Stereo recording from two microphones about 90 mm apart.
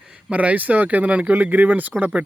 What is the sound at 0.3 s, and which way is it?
Speech, 15° right (ahead or behind).